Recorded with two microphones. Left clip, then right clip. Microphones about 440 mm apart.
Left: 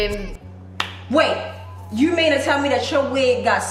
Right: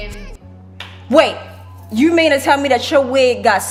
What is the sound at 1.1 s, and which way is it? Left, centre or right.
A woman's voice, right.